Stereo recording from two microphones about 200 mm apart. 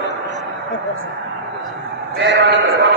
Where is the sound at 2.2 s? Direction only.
65° right (ahead or behind).